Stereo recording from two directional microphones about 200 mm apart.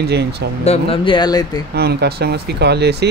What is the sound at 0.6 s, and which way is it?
Speech, 25° left (ahead or behind).